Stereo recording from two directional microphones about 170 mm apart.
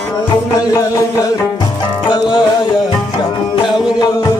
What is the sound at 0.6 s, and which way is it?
Music, 20° left (ahead or behind).